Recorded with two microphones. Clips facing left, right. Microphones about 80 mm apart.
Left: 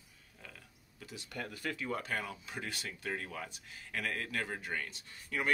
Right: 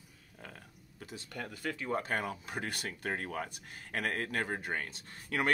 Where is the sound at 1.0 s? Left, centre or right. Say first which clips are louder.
Right 2 dB; right.